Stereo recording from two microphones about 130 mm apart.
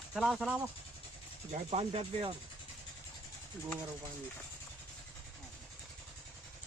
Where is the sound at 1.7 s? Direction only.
50° right (ahead or behind).